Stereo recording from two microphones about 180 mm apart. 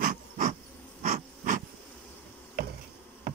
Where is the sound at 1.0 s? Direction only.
45° right (ahead or behind).